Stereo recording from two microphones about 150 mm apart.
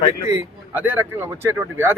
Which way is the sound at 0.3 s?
10° right (ahead or behind).